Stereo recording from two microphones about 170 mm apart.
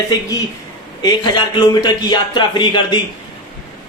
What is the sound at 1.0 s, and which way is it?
A man's voice, 25° left (ahead or behind).